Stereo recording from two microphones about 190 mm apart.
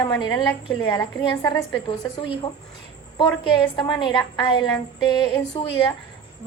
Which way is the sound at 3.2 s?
25° left (ahead or behind).